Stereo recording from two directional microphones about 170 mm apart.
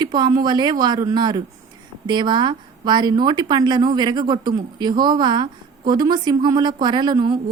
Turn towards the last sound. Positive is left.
turn(degrees=-25)  # may be behind; listen again after turning